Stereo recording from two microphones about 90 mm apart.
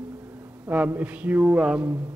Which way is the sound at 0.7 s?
20° right (ahead or behind).